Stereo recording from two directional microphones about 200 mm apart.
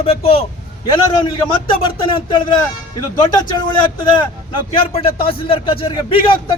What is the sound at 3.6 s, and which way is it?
Speech, 25° left (ahead or behind).